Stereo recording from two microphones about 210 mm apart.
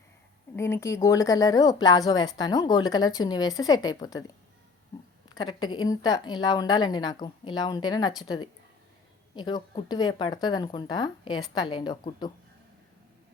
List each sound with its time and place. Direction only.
0.5 s speech: 10° left (ahead or behind)
5.3 s speech: 20° left (ahead or behind)